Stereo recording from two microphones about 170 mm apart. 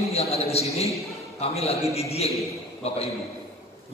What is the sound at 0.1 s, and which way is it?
A man's voice, 35° left (ahead or behind).